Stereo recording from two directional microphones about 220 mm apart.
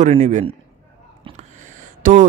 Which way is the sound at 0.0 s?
30° right (ahead or behind).